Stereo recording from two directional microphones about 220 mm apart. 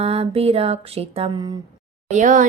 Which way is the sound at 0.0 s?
25° right (ahead or behind).